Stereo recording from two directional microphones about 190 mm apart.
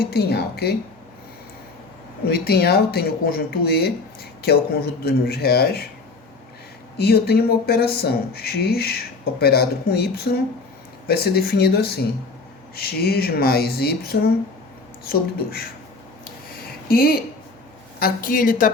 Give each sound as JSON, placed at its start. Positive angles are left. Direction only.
{"t": 0.1, "sound": "speech", "side_deg": 55}
{"t": 2.2, "sound": "speech", "side_deg": 55}
{"t": 7.0, "sound": "a woman's voice", "side_deg": 55}
{"t": 16.9, "sound": "a woman's voice", "side_deg": 50}